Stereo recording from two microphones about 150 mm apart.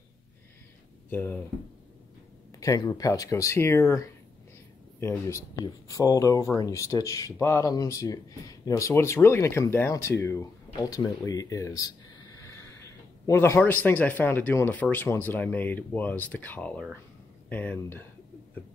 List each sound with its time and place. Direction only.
1.1 s speech: 15° left (ahead or behind)
2.6 s speech: 20° left (ahead or behind)
5.0 s speech: 20° left (ahead or behind)
11.2 s a sound: 20° left (ahead or behind)
13.7 s speech: 10° left (ahead or behind)